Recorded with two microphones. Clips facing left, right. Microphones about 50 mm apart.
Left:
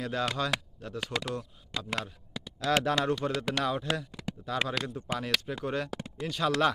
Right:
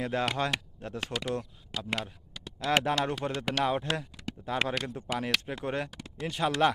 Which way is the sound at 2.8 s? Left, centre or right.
Right.